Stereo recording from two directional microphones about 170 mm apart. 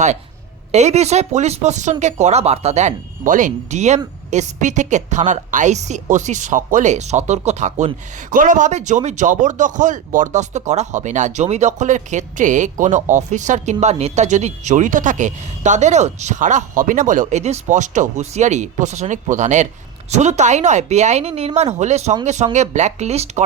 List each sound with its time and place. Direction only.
0.7 s a woman's voice: 40° right (ahead or behind)